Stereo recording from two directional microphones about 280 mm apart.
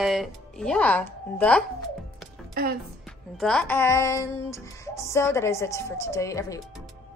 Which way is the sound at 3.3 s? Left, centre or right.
Centre.